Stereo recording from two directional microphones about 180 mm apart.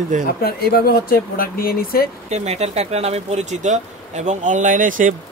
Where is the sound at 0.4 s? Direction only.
60° left (ahead or behind).